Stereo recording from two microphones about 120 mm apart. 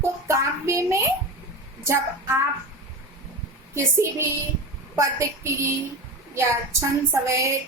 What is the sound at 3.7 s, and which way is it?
Speech, 20° right (ahead or behind).